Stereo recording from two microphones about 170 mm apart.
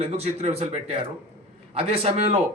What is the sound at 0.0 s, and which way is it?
A man's voice, 35° right (ahead or behind).